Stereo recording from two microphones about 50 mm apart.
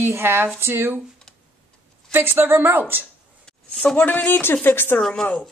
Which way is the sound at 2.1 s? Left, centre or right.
Right.